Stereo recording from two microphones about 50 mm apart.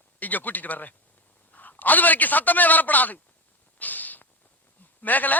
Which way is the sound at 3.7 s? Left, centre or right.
Left.